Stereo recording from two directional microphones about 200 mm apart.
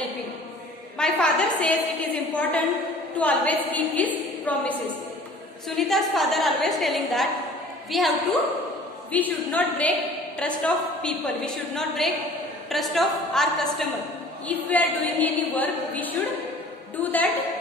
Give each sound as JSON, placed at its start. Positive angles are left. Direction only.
{"t": 0.9, "sound": "a woman's voice", "side_deg": 5}
{"t": 5.8, "sound": "a woman's voice", "side_deg": 0}